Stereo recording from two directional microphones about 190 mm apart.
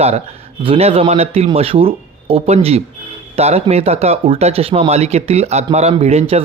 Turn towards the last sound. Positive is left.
turn(degrees=-35)  # may be behind; listen again after turning